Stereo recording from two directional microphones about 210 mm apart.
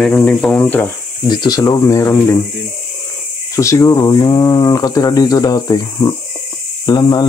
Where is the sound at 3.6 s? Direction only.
15° left (ahead or behind).